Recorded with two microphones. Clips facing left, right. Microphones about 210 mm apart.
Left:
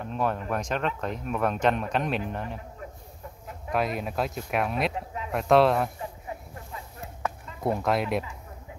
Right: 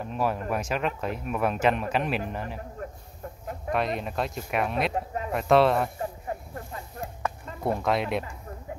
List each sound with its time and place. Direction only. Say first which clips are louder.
0.0 s speech: right 1 dB; 5° right (ahead or behind)
3.7 s speech: left 1 dB; centre (ahead or behind)
4.9 s a sound: right 4 dB; 45° right (ahead or behind)
5.3 s speech: even; centre (ahead or behind)
5.9 s a sound: right 4 dB; 50° right (ahead or behind)
7.6 s speech: even; centre (ahead or behind)